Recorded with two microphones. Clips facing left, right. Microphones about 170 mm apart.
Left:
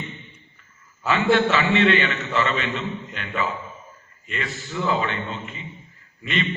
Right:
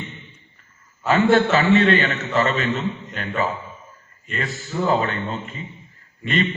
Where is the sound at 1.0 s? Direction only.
40° right (ahead or behind).